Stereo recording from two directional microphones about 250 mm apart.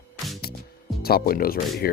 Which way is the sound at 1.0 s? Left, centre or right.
Left.